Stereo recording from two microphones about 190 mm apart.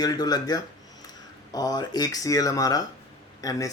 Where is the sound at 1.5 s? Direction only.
20° left (ahead or behind).